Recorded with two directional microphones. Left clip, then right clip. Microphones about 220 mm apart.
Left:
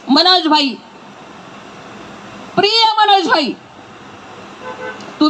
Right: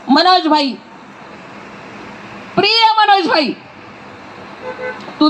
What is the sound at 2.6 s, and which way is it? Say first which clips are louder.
Speech: right 1 dB; 30° right (ahead or behind).